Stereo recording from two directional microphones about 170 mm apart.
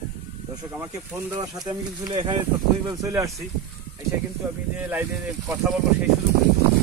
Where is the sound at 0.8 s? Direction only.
15° right (ahead or behind).